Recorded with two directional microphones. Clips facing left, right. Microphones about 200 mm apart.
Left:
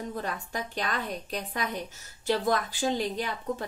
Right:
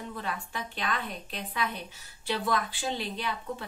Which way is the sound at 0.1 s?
40° left (ahead or behind).